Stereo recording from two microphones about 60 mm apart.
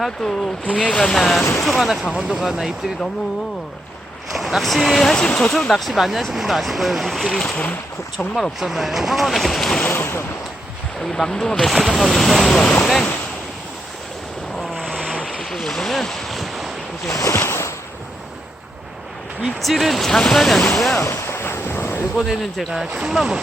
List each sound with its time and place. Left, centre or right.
0.0 s speech: centre
0.6 s speech: centre
4.4 s speech: centre
7.5 s speech: left
8.4 s speech: centre
9.9 s a sound: left
11.0 s speech: centre
12.8 s waves: centre
14.6 s boat: centre
17.1 s speech: left
17.4 s ocean: left
19.6 s speech: centre
21.0 s a sound: left
22.3 s speech: centre